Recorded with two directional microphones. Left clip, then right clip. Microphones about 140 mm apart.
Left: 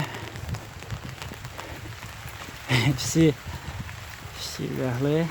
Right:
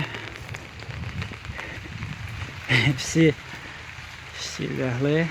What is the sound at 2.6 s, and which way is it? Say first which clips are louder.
Speech: right 3 dB; 15° left (ahead or behind).